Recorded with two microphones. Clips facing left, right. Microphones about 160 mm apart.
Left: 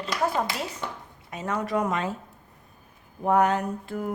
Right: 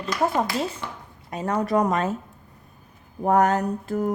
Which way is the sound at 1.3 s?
35° right (ahead or behind).